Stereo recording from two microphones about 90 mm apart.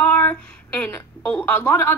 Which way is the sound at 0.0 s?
20° left (ahead or behind).